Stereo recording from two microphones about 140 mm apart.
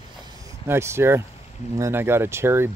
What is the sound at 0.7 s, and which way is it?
Speech, 20° right (ahead or behind).